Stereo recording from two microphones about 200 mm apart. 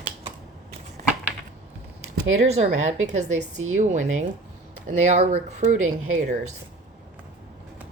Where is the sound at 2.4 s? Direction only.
35° right (ahead or behind).